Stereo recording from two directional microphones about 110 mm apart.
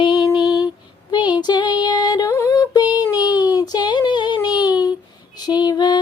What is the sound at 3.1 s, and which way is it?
Speech, 15° right (ahead or behind).